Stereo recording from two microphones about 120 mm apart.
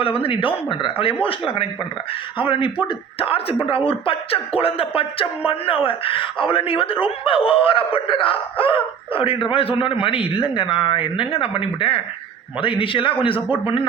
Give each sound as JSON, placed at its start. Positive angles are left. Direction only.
{"t": 0.0, "sound": "speech", "side_deg": 50}